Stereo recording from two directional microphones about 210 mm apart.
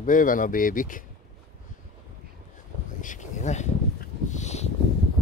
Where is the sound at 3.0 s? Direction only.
35° left (ahead or behind).